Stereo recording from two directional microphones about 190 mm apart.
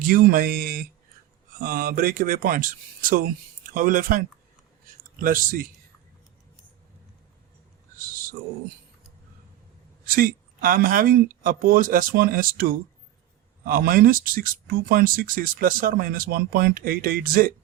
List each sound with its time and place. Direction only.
0.0 s speech: 50° right (ahead or behind)
10.1 s speech: 50° right (ahead or behind)